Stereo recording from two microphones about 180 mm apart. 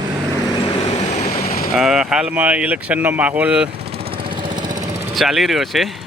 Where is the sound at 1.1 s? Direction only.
40° left (ahead or behind).